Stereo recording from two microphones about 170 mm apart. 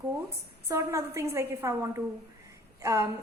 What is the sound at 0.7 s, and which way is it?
A woman's voice, 15° right (ahead or behind).